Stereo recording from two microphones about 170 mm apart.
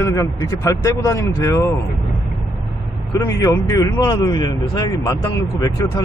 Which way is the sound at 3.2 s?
20° left (ahead or behind).